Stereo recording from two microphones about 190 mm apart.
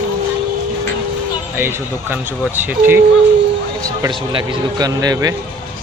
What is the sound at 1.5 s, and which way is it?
Speech, 10° right (ahead or behind).